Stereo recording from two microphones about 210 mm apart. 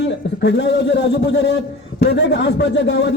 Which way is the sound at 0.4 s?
55° left (ahead or behind).